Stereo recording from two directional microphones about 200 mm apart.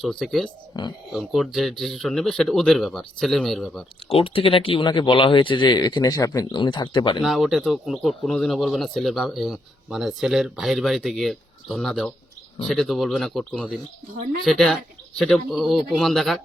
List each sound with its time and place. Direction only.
0.0 s speech: centre (ahead or behind)
0.7 s speech: 20° left (ahead or behind)
1.1 s speech: centre (ahead or behind)
4.1 s speech: 25° left (ahead or behind)
7.2 s speech: centre (ahead or behind)